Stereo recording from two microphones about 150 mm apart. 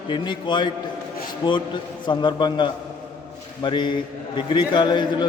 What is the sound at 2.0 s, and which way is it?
A man's voice, 30° left (ahead or behind).